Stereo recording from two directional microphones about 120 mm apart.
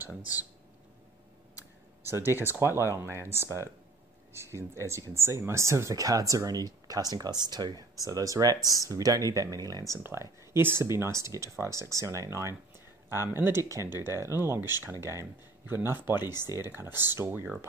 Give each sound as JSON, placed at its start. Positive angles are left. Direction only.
{"t": 2.0, "sound": "speech", "side_deg": -20}
{"t": 10.0, "sound": "speech", "side_deg": -20}